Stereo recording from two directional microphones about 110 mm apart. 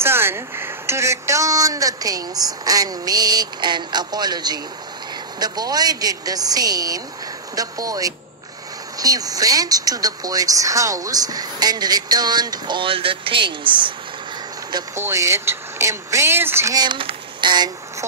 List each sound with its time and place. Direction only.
0.0 s a woman's voice: 20° right (ahead or behind); by 13.9 s 45° right (ahead or behind)
15.0 s speech: 25° right (ahead or behind)
16.7 s speech: 45° right (ahead or behind)